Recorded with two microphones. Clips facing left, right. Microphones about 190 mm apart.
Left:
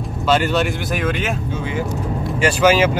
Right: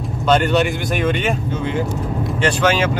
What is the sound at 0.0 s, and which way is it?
Speech, 5° left (ahead or behind).